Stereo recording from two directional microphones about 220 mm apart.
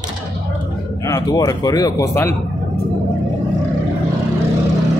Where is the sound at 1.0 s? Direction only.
15° left (ahead or behind).